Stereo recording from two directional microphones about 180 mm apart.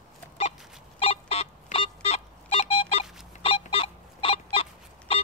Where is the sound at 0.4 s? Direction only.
35° left (ahead or behind).